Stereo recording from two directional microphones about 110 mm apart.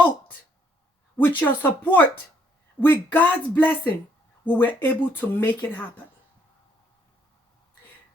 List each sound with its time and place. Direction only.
1.1 s speech: 15° left (ahead or behind)